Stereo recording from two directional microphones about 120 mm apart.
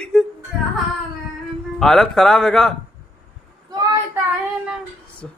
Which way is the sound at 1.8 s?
5° left (ahead or behind).